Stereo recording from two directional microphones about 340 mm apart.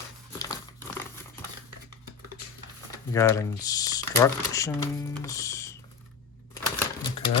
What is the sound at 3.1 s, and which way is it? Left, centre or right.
Speech, centre.